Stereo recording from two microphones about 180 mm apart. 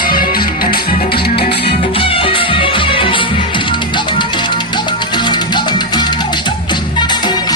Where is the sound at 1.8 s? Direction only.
30° left (ahead or behind).